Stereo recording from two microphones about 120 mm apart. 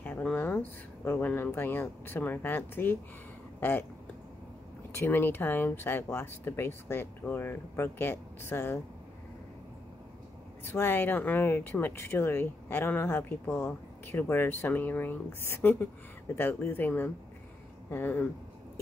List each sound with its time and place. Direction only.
0.0 s speech: 10° left (ahead or behind)
4.9 s speech: 15° left (ahead or behind)
10.6 s speech: 20° left (ahead or behind)